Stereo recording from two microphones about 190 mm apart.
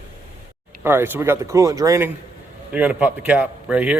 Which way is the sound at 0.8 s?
10° right (ahead or behind).